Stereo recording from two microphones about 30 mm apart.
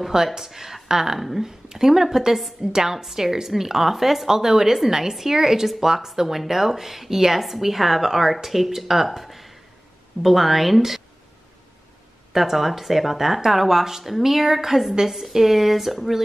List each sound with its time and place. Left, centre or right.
0.1 s a woman's voice: centre
12.3 s speech: centre